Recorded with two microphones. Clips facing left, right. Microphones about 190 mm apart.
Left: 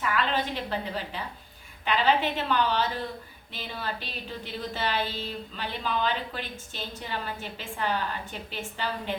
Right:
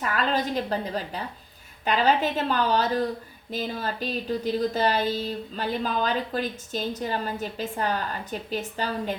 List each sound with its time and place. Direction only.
0.0 s a woman's voice: 40° right (ahead or behind)